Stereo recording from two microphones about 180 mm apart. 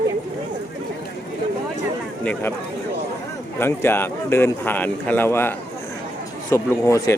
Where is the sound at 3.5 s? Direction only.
10° left (ahead or behind).